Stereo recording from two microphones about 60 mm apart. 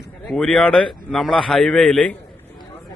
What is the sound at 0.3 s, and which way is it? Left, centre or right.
Speech, centre.